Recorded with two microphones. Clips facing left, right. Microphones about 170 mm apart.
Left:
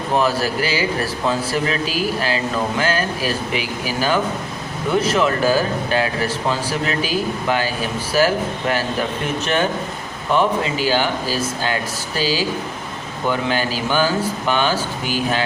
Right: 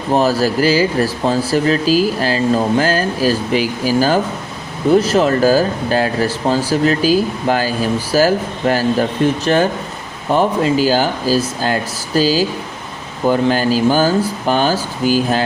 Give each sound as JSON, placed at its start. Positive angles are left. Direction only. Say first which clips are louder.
{"t": 0.2, "sound": "speech", "louder": "right 5 dB", "side_deg": -35}